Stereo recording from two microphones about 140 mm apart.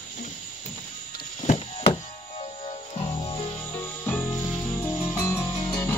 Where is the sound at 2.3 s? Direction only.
45° left (ahead or behind).